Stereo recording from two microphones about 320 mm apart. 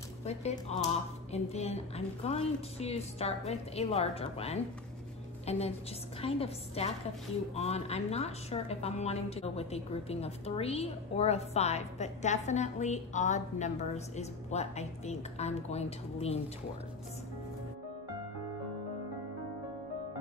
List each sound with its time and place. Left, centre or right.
0.2 s a woman's voice: centre